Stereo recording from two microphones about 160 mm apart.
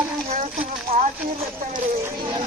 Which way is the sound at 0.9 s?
60° right (ahead or behind).